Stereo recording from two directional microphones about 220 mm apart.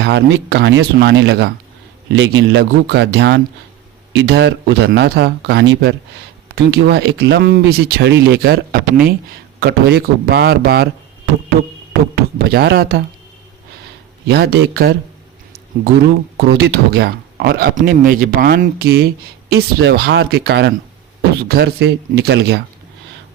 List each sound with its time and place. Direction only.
0.0 s speech: 55° right (ahead or behind)
12.1 s speech: 45° right (ahead or behind)
14.3 s speech: 45° right (ahead or behind)
16.6 s speech: 45° right (ahead or behind)